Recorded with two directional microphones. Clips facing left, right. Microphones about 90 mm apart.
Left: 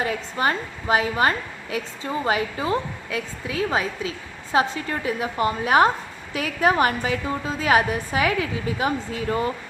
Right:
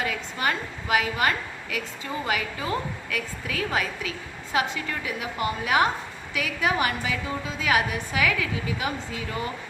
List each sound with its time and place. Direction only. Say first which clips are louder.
0.0 s a woman's voice: left 4 dB; 35° left (ahead or behind)